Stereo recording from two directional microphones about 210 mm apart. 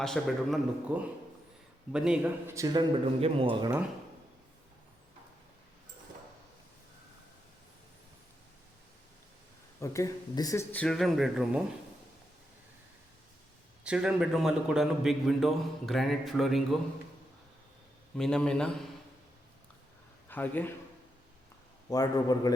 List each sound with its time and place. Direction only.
0.0 s a man's voice: centre (ahead or behind)
2.6 s speech: 15° right (ahead or behind)
3.2 s speech: 25° right (ahead or behind)
9.8 s speech: 15° left (ahead or behind); by 11.6 s centre (ahead or behind)
13.8 s a man's voice: 5° right (ahead or behind)
18.2 s a man's voice: 5° left (ahead or behind)
20.2 s a man's voice: 10° left (ahead or behind)
21.8 s speech: 20° left (ahead or behind)